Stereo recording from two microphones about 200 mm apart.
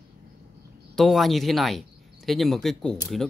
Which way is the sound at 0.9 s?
Centre (ahead or behind).